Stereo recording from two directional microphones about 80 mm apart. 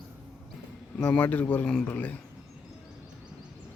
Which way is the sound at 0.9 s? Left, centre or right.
Centre.